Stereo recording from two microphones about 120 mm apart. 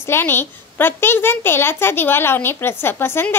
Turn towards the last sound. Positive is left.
turn(degrees=20)  # may be behind; listen again after turning